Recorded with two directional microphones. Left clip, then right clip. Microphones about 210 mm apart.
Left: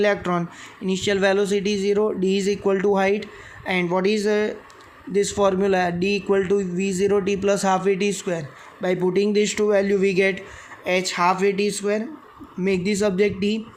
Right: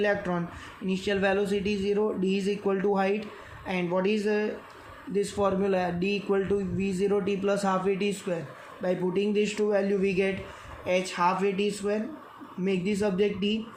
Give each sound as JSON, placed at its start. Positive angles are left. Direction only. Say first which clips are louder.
{"t": 0.0, "sound": "speech", "louder": "left 6 dB", "side_deg": 50}